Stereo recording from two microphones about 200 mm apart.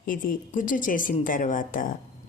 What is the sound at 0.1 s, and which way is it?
A woman's voice, 40° left (ahead or behind).